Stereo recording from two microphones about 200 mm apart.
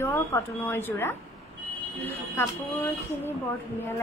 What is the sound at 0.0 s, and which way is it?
Speech, 10° left (ahead or behind).